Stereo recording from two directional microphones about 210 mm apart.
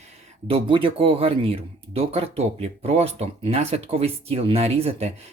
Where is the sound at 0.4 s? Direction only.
25° right (ahead or behind).